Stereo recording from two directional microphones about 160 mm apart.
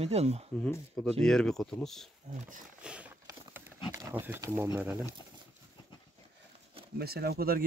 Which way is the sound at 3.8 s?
15° right (ahead or behind).